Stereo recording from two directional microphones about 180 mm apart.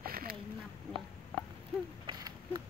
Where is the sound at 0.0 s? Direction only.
55° right (ahead or behind).